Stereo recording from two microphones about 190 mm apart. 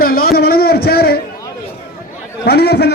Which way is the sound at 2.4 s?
60° left (ahead or behind).